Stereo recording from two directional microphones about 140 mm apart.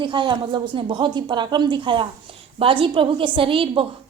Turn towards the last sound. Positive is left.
turn(degrees=-40)  # may be behind; listen again after turning